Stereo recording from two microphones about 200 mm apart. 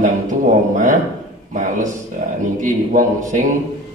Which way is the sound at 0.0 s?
40° right (ahead or behind).